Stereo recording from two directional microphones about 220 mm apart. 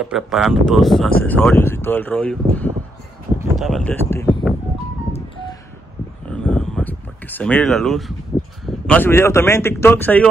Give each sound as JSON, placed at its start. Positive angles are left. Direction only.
{"t": 0.0, "sound": "speech", "side_deg": 0}
{"t": 6.2, "sound": "a sound", "side_deg": 5}
{"t": 8.6, "sound": "speech", "side_deg": 5}